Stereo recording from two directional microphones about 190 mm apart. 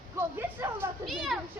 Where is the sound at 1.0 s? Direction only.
Centre (ahead or behind).